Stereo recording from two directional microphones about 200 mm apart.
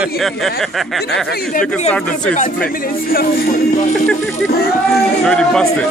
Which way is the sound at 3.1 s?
45° left (ahead or behind).